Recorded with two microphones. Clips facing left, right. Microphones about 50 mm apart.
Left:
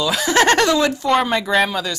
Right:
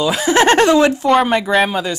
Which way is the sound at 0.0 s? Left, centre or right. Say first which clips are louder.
Right 3 dB; centre.